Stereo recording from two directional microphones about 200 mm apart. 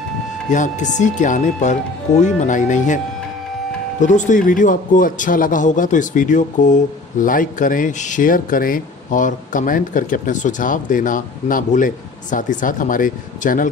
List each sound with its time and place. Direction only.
0.5 s a man's voice: 40° left (ahead or behind)
4.0 s a man's voice: 40° left (ahead or behind)